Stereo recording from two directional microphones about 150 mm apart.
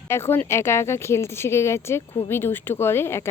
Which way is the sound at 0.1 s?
15° left (ahead or behind).